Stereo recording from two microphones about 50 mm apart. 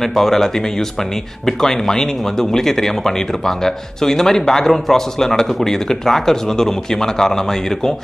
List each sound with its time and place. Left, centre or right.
0.0 s speech: centre